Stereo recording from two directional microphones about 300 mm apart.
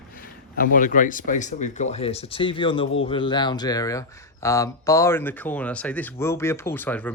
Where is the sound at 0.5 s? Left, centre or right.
Left.